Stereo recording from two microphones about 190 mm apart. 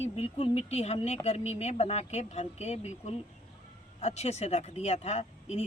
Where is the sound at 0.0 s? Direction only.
30° left (ahead or behind).